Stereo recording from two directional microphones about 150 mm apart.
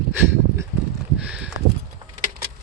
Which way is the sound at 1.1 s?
10° right (ahead or behind).